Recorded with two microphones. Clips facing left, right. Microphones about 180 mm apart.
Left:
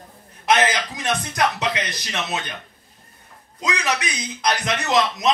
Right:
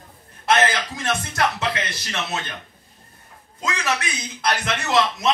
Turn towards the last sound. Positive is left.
turn(degrees=15)  # may be behind; listen again after turning